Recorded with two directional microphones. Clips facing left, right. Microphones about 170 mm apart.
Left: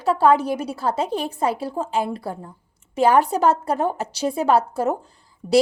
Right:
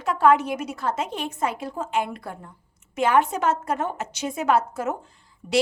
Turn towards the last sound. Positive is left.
turn(degrees=35)  # may be behind; listen again after turning